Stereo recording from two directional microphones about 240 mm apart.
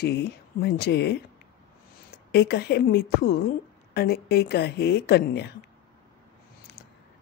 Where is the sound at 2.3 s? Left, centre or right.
Left.